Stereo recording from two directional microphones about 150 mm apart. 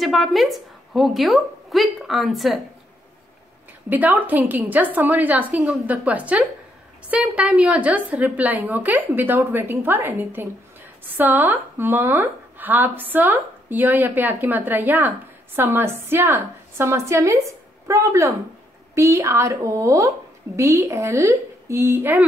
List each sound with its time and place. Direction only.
0.0 s a woman's voice: centre (ahead or behind)
3.9 s a woman's voice: 10° right (ahead or behind)